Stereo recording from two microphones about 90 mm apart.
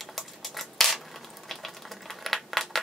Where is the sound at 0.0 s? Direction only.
Centre (ahead or behind).